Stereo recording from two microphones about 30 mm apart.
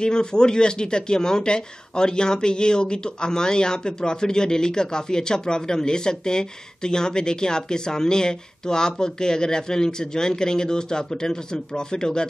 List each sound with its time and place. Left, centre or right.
0.0 s speech: left